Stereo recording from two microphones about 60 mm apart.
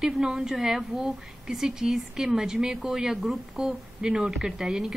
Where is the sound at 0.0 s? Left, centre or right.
Centre.